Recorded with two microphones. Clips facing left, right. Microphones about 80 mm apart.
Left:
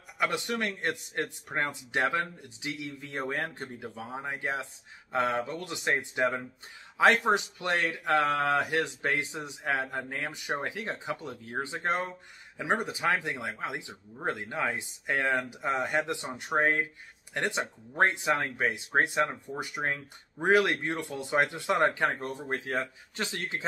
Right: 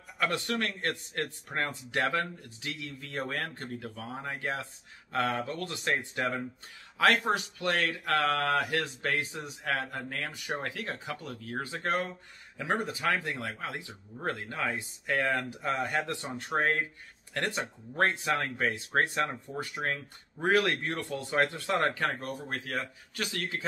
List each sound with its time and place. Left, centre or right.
0.2 s speech: centre